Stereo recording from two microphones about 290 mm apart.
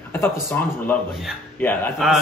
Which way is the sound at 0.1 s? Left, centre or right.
Centre.